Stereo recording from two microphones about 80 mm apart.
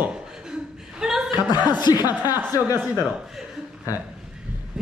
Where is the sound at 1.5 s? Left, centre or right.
Left.